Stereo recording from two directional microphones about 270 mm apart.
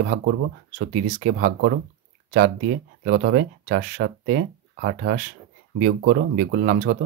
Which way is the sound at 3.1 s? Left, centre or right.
Right.